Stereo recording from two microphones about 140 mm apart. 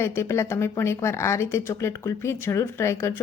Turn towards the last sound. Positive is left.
turn(degrees=20)  # may be behind; listen again after turning